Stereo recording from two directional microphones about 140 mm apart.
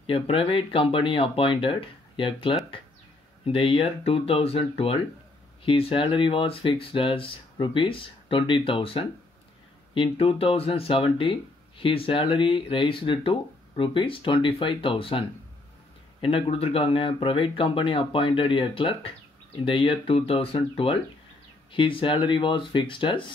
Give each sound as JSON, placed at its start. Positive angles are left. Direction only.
{"t": 0.0, "sound": "speech", "side_deg": 40}